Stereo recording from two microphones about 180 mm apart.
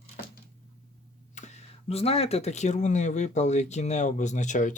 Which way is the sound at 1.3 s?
40° left (ahead or behind).